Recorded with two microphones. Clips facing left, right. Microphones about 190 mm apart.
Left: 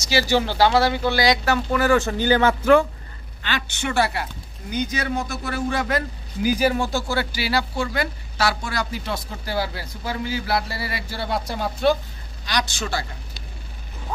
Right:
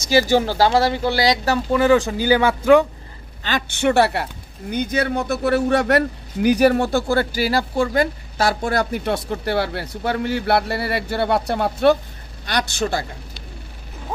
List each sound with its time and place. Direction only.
0.1 s speech: 45° right (ahead or behind)
1.7 s speech: 20° right (ahead or behind)
3.4 s speech: 50° right (ahead or behind)